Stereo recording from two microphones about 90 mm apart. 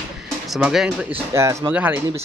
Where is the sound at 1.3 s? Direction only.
35° right (ahead or behind).